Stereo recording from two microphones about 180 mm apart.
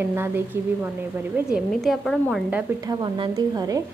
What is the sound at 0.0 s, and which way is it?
Speech, 10° right (ahead or behind).